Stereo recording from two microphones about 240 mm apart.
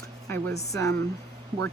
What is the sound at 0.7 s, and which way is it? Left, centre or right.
Speech, centre.